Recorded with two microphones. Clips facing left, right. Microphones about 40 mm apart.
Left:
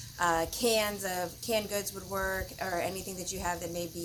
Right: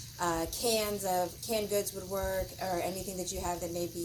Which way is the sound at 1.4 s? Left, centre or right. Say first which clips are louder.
Even; left.